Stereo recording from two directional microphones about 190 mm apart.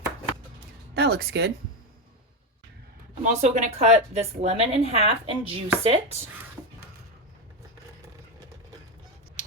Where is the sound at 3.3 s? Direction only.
40° right (ahead or behind).